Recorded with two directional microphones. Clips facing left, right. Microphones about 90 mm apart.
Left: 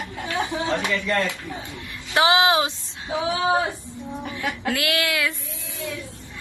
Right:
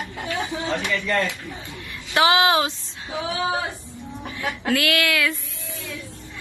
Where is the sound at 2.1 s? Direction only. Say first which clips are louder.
Even; 20° left (ahead or behind).